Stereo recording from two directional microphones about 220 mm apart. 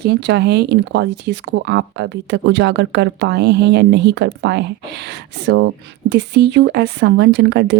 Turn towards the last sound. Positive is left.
turn(degrees=-50)  # may be behind; listen again after turning